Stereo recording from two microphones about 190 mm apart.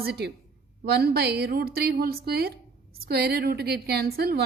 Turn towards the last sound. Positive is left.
turn(degrees=-55)  # may be behind; listen again after turning